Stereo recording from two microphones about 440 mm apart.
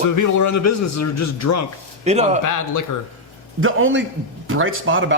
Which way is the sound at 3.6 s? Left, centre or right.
Right.